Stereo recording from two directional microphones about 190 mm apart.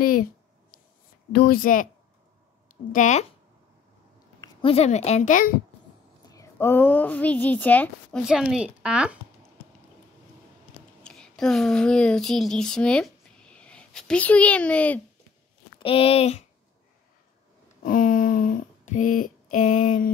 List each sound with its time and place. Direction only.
0.0 s speech: 50° left (ahead or behind)
1.3 s speech: 55° left (ahead or behind)
2.9 s speech: 40° left (ahead or behind)
4.4 s speech: 25° left (ahead or behind); by 5.6 s 45° left (ahead or behind)
6.3 s a woman's voice: 10° left (ahead or behind)
8.2 s speech: centre (ahead or behind)
11.1 s a sound: 5° left (ahead or behind)
15.8 s speech: 30° left (ahead or behind)
17.8 s a sound: 45° left (ahead or behind)